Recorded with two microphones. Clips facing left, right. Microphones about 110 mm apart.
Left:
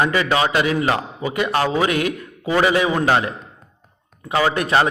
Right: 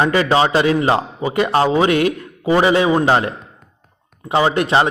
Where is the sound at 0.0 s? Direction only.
30° right (ahead or behind).